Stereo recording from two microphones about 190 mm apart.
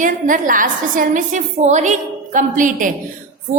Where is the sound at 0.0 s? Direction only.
45° right (ahead or behind).